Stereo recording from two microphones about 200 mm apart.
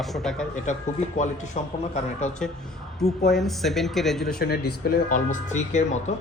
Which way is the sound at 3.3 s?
Centre (ahead or behind).